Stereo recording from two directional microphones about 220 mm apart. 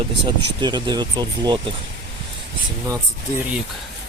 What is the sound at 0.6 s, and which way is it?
Speech, 20° right (ahead or behind).